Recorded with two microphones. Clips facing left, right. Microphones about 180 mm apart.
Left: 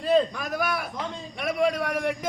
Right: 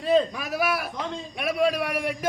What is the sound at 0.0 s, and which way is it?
A man's voice, 5° right (ahead or behind).